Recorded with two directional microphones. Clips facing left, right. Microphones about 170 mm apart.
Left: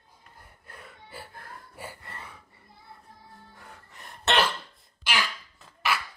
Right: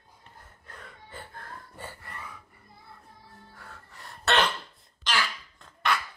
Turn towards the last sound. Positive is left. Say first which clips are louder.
# right 1 dB
turn(degrees=5)  # may be behind; listen again after turning